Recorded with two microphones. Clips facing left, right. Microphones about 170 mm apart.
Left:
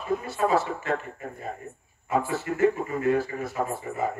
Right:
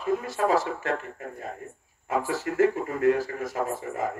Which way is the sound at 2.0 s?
90° right.